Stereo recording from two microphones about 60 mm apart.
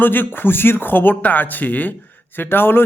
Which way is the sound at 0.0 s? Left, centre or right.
Left.